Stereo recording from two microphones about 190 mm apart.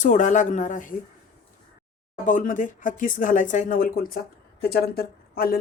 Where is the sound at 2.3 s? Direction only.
40° left (ahead or behind).